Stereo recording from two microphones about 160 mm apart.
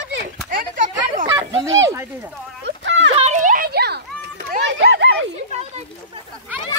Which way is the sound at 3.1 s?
45° right (ahead or behind).